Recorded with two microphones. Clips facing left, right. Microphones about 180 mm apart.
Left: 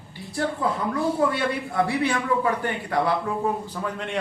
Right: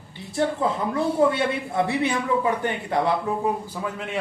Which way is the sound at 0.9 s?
25° right (ahead or behind).